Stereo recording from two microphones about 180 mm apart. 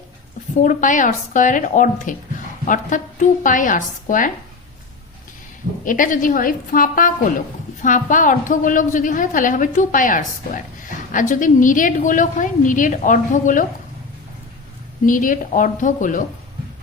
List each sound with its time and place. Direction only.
0.6 s a woman's voice: 45° left (ahead or behind)
5.8 s a woman's voice: 50° left (ahead or behind)
15.0 s a woman's voice: 50° left (ahead or behind)